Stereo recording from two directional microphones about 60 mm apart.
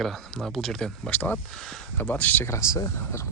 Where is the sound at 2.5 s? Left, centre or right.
Left.